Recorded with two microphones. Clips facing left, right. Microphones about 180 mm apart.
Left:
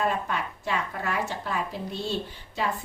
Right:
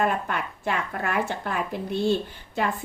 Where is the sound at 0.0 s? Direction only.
55° right (ahead or behind).